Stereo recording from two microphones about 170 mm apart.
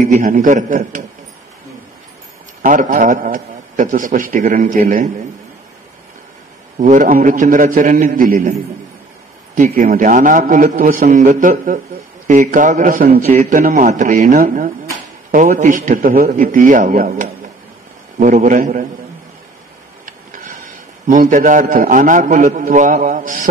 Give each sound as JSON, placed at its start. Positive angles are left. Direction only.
{"t": 0.0, "sound": "a man's voice", "side_deg": -50}
{"t": 2.6, "sound": "a man's voice", "side_deg": -50}
{"t": 6.8, "sound": "a man's voice", "side_deg": -50}
{"t": 9.6, "sound": "a man's voice", "side_deg": -50}
{"t": 21.1, "sound": "a man's voice", "side_deg": -50}